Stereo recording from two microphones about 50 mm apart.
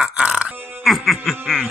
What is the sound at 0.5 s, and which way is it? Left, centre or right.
Speech, right.